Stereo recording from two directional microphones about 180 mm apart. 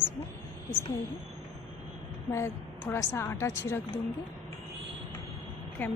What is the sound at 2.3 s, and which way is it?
A woman's voice, 15° left (ahead or behind).